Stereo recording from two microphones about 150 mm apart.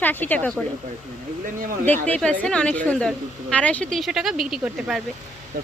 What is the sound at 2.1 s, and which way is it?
A woman's voice, 10° left (ahead or behind).